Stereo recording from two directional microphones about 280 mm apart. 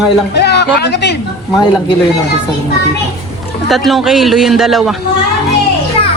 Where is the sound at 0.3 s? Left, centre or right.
Left.